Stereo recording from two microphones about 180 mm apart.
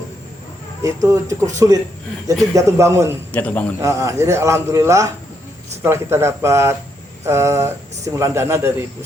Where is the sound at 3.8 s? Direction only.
15° right (ahead or behind).